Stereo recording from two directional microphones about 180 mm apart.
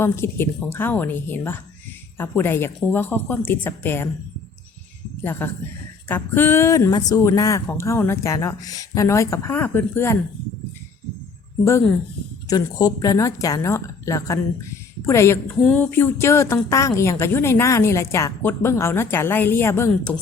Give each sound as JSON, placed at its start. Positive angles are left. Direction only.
{"t": 0.0, "sound": "a woman's voice", "side_deg": 15}
{"t": 5.2, "sound": "a woman's voice", "side_deg": 10}
{"t": 12.5, "sound": "a woman's voice", "side_deg": 20}